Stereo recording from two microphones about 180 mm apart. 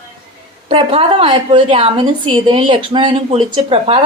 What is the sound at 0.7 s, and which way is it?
A woman's voice, 30° right (ahead or behind).